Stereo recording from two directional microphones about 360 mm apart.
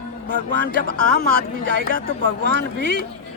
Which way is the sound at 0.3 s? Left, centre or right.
Right.